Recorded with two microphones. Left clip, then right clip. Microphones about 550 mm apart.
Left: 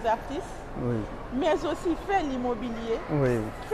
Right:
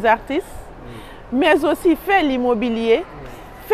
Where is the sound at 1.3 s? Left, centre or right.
Right.